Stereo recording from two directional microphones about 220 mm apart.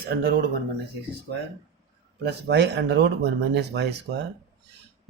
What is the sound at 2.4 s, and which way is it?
Speech, 50° right (ahead or behind).